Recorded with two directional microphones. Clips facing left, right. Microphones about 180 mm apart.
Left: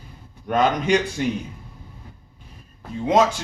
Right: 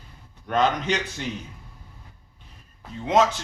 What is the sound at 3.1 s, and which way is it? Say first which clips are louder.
Speech: left 2 dB; 10° left (ahead or behind).